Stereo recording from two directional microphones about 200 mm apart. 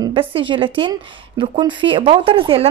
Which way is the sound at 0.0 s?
25° right (ahead or behind).